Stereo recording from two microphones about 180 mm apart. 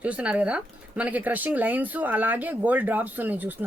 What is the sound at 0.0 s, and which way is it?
Speech, 5° right (ahead or behind).